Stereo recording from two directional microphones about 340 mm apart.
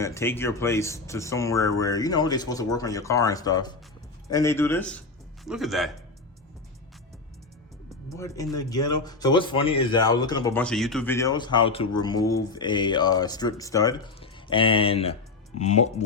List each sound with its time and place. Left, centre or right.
0.0 s a man's voice: centre
8.1 s speech: centre